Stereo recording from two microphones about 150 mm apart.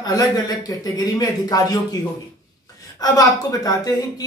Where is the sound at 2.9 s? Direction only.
25° left (ahead or behind).